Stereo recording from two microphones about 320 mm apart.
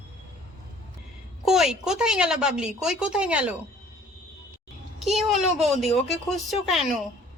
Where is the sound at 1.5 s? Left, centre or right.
Centre.